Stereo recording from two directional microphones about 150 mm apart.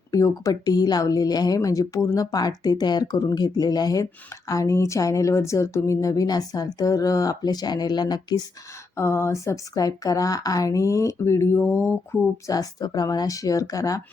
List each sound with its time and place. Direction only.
0.1 s speech: 20° left (ahead or behind)
12.5 s speech: 25° left (ahead or behind)